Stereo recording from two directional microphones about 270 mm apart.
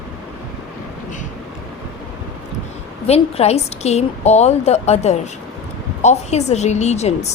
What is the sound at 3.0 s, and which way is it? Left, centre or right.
A woman's voice, left.